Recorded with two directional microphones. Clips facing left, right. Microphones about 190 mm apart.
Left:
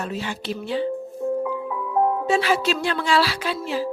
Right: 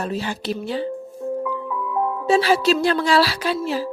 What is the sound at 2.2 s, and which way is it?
Speech, 35° right (ahead or behind).